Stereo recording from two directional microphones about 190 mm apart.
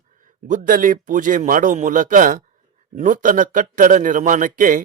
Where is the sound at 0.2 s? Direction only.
45° right (ahead or behind).